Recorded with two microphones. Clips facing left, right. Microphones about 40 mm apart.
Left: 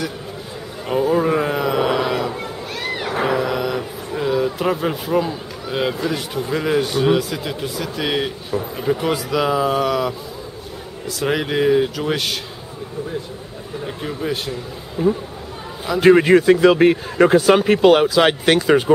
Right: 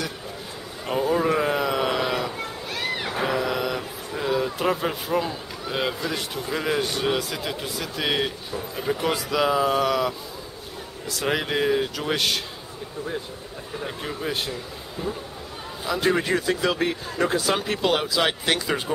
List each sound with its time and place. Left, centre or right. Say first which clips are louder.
0.8 s a sound: left 5 dB; centre
3.3 s a man's voice: left 4 dB; centre
13.8 s a man's voice: left 5 dB; centre
15.0 s speech: left 12 dB; left
16.0 s speech: left 12 dB; left